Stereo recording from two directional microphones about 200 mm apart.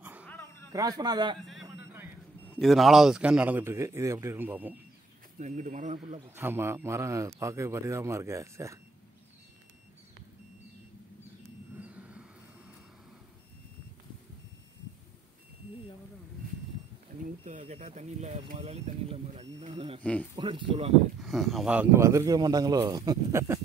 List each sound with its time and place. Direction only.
0.0 s a sound: 10° right (ahead or behind)
0.3 s a sound: 10° left (ahead or behind)
0.7 s a man's voice: 20° right (ahead or behind)
2.6 s a man's voice: centre (ahead or behind)
5.4 s speech: 35° right (ahead or behind)
6.3 s a man's voice: 10° right (ahead or behind)
11.8 s a sound: 5° right (ahead or behind)
17.2 s speech: 35° right (ahead or behind)
20.0 s speech: 5° left (ahead or behind)
20.3 s a man's voice: 25° right (ahead or behind)
21.2 s a man's voice: centre (ahead or behind)